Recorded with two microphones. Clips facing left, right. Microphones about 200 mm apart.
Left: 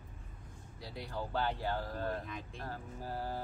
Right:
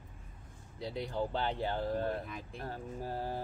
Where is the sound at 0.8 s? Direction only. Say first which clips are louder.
Right 6 dB; 20° right (ahead or behind).